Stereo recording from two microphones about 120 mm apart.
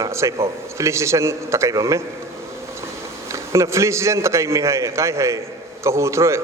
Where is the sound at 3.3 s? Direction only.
25° right (ahead or behind).